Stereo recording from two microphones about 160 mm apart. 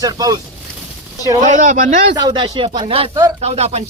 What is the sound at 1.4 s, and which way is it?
Speech, 50° right (ahead or behind).